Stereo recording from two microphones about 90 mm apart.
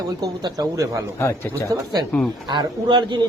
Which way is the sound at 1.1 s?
30° left (ahead or behind).